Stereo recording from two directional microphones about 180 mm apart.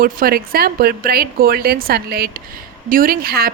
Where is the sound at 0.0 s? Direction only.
55° right (ahead or behind).